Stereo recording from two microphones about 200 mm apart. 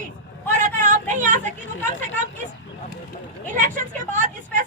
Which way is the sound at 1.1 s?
40° right (ahead or behind).